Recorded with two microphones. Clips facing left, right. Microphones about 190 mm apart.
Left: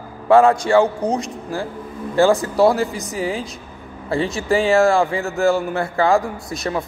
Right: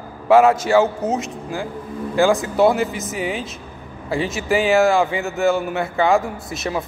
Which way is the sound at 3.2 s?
30° left (ahead or behind).